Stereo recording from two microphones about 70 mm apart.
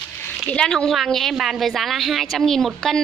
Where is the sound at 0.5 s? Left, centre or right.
Centre.